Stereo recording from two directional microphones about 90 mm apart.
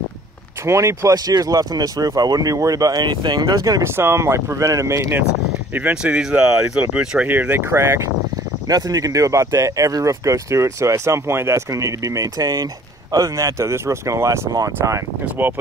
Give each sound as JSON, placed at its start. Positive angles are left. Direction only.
{"t": 0.7, "sound": "speech", "side_deg": -35}
{"t": 3.1, "sound": "speech", "side_deg": -60}
{"t": 3.3, "sound": "speech", "side_deg": -40}
{"t": 3.8, "sound": "speech", "side_deg": -25}
{"t": 5.7, "sound": "speech", "side_deg": -20}
{"t": 7.2, "sound": "speech", "side_deg": -20}
{"t": 8.6, "sound": "speech", "side_deg": -45}
{"t": 15.4, "sound": "speech", "side_deg": -20}